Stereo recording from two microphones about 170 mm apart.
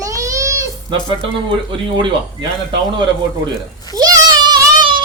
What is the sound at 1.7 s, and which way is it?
Speech, 30° right (ahead or behind).